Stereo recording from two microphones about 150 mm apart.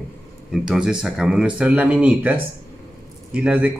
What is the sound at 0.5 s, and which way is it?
A man's voice, 5° right (ahead or behind).